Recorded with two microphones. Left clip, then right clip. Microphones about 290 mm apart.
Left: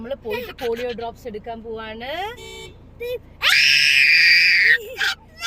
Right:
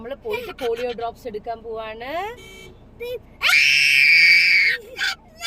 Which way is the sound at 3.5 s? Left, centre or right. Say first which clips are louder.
Even; centre.